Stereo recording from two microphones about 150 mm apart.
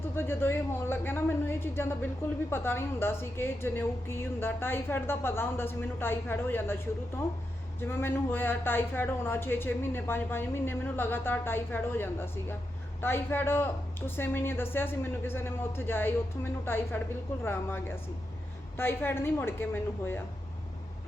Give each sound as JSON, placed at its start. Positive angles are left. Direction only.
{"t": 0.2, "sound": "a man's voice", "side_deg": 15}